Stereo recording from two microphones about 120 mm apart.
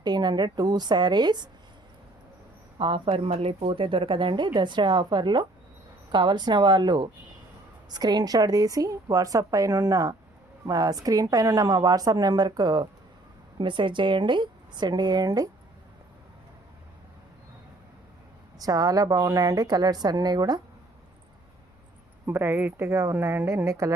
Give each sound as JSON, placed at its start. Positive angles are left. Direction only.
{"t": 0.0, "sound": "a woman's voice", "side_deg": -35}
{"t": 2.7, "sound": "a woman's voice", "side_deg": -45}
{"t": 18.6, "sound": "a woman's voice", "side_deg": -30}
{"t": 22.3, "sound": "a woman's voice", "side_deg": -15}